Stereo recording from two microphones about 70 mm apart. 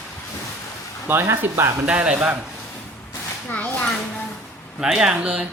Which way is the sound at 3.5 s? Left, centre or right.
Left.